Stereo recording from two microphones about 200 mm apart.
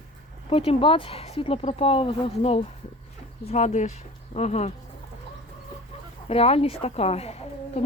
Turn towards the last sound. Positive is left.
turn(degrees=30)  # may be behind; listen again after turning